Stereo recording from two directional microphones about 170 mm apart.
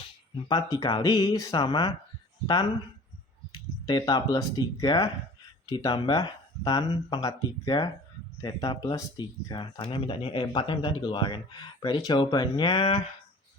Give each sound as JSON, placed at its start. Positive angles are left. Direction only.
{"t": 0.4, "sound": "speech", "side_deg": 20}
{"t": 3.5, "sound": "speech", "side_deg": 25}